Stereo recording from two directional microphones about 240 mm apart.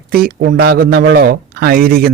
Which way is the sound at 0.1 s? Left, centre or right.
Right.